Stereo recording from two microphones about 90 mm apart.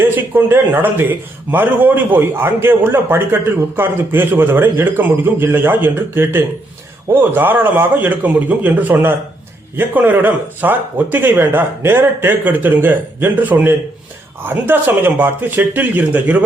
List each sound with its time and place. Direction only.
0.3 s a man's voice: 25° right (ahead or behind)